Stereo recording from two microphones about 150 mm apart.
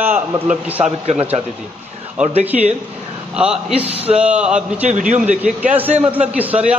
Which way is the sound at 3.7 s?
40° right (ahead or behind).